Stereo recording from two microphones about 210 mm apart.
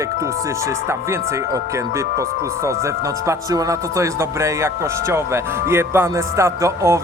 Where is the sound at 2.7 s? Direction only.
15° right (ahead or behind).